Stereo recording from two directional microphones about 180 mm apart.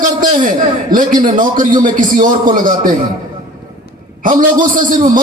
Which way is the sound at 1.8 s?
50° right (ahead or behind).